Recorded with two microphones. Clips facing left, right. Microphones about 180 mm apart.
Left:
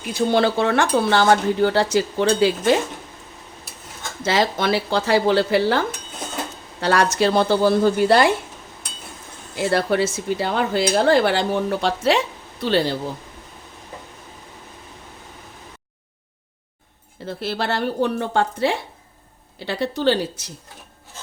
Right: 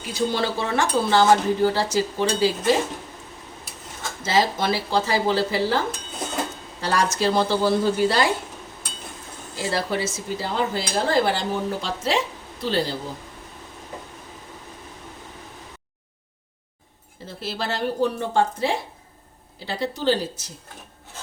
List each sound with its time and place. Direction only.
0.3 s speech: 65° left (ahead or behind)
4.2 s speech: 65° left (ahead or behind)
6.8 s speech: 65° left (ahead or behind)
9.6 s speech: 60° left (ahead or behind)
17.2 s speech: 65° left (ahead or behind)